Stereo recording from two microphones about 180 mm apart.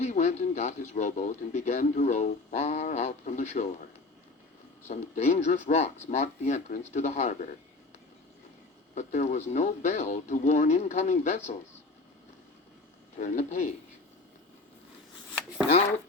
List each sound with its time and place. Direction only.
0.0 s a man's voice: 40° left (ahead or behind)
4.9 s a man's voice: 40° left (ahead or behind)
9.0 s a man's voice: 40° left (ahead or behind)
13.1 s a man's voice: 40° left (ahead or behind)